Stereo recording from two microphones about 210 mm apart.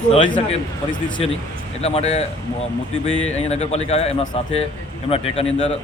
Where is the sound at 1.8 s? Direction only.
30° left (ahead or behind).